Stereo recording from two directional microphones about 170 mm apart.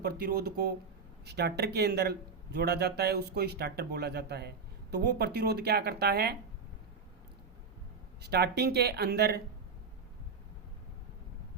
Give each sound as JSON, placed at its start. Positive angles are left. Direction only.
{"t": 0.0, "sound": "speech", "side_deg": -65}
{"t": 8.2, "sound": "speech", "side_deg": -75}